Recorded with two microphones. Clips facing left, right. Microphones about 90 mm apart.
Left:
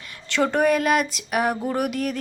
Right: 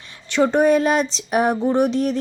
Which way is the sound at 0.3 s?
20° right (ahead or behind).